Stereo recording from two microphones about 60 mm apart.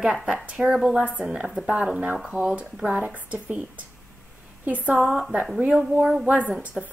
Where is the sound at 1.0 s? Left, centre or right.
Right.